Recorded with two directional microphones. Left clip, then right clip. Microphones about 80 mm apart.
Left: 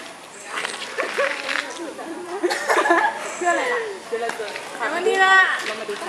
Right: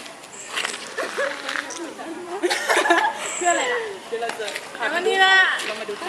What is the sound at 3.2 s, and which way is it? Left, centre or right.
Chuckle, centre.